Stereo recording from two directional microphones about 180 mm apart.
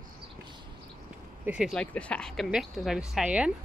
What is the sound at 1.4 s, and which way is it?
A woman's voice, 5° right (ahead or behind).